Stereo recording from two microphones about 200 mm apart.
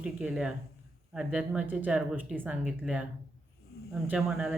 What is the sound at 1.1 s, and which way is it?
Speech, 5° right (ahead or behind).